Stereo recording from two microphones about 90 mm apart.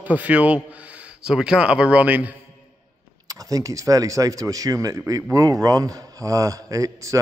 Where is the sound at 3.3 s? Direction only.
40° right (ahead or behind).